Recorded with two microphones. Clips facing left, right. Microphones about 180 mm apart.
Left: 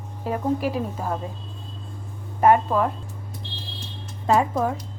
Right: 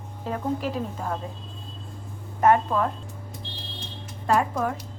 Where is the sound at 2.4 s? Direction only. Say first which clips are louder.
Left 2 dB; 10° left (ahead or behind).